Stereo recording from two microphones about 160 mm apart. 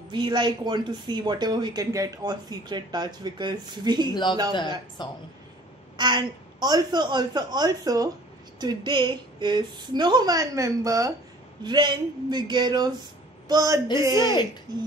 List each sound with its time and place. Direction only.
0.1 s speech: 30° right (ahead or behind)
4.1 s speech: 30° left (ahead or behind)
5.9 s speech: 25° right (ahead or behind)